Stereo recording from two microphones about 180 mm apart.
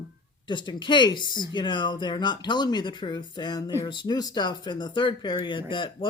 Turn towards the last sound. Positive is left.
turn(degrees=25)  # may be behind; listen again after turning